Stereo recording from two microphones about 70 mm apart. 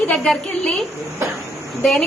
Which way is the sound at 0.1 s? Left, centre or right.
Centre.